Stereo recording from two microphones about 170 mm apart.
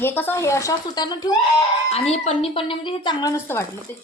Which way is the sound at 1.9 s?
40° left (ahead or behind).